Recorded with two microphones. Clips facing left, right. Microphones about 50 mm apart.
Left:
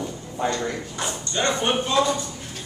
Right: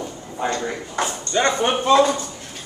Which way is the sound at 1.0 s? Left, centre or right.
Right.